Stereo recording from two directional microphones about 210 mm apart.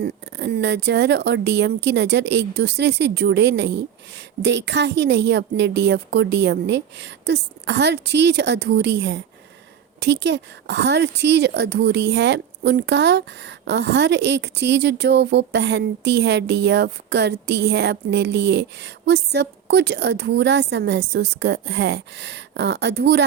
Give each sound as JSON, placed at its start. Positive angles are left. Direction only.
{"t": 0.0, "sound": "speech", "side_deg": -50}